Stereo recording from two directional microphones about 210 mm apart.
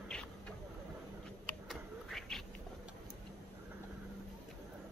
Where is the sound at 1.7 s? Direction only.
Centre (ahead or behind).